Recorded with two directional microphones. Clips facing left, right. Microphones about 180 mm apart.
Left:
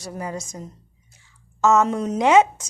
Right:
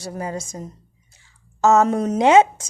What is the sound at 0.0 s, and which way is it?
Speech, 30° right (ahead or behind).